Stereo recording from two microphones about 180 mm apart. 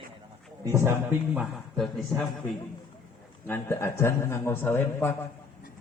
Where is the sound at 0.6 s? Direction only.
15° right (ahead or behind).